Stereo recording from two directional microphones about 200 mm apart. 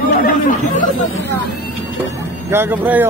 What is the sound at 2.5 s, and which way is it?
Speech, 10° right (ahead or behind).